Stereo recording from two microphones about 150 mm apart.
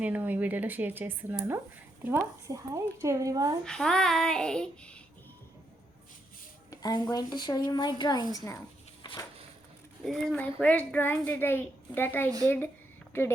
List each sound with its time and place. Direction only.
0.0 s speech: 10° right (ahead or behind)
3.6 s child singing: 5° left (ahead or behind)
6.7 s a sound: 25° left (ahead or behind)
7.1 s a woman's voice: 30° left (ahead or behind)
10.1 s a child's voice: centre (ahead or behind)